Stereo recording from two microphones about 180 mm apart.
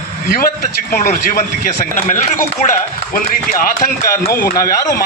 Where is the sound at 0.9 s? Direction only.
45° left (ahead or behind).